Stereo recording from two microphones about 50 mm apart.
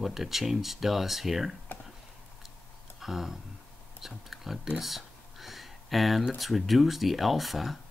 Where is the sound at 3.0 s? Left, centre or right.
Centre.